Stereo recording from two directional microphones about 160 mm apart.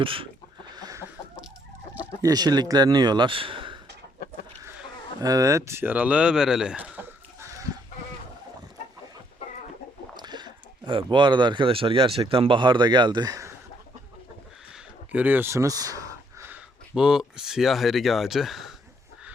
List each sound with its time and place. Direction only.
0.0 s chicken: 35° right (ahead or behind)
0.8 s chicken: 20° right (ahead or behind)
2.2 s speech: 25° right (ahead or behind)
5.2 s speech: 20° right (ahead or behind)
10.2 s speech: 25° right (ahead or behind)
15.1 s a sound: 10° right (ahead or behind)
16.9 s speech: 5° right (ahead or behind)